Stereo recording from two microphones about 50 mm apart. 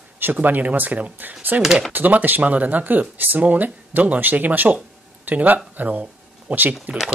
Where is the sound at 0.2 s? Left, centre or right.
Right.